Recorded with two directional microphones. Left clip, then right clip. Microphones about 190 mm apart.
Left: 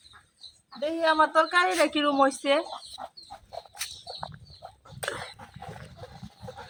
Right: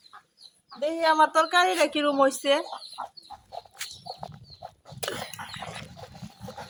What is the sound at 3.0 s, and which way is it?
Chicken, 40° left (ahead or behind).